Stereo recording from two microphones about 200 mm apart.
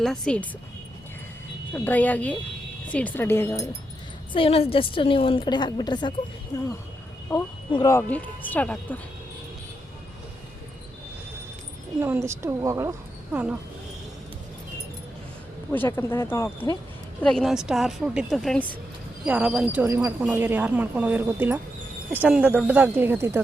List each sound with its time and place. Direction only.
0.0 s a woman's voice: 5° left (ahead or behind)
1.7 s speech: 10° left (ahead or behind)
4.4 s a woman's voice: 30° left (ahead or behind)
7.7 s speech: 20° left (ahead or behind)
11.9 s speech: 10° right (ahead or behind)
15.7 s speech: 10° left (ahead or behind)
17.2 s a woman's voice: centre (ahead or behind)